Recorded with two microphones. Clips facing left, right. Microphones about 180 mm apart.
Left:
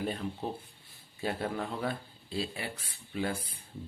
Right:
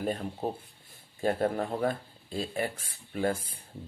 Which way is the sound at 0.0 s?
45° right (ahead or behind).